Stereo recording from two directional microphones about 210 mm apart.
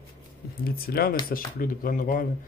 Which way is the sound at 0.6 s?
45° left (ahead or behind).